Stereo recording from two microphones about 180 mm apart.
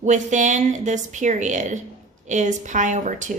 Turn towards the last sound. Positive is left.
turn(degrees=-45)  # may be behind; listen again after turning